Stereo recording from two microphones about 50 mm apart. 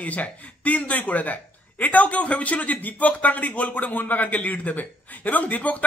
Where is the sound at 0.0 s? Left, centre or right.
Left.